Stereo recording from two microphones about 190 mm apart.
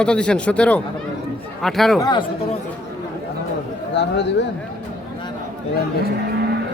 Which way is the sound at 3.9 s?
65° left (ahead or behind).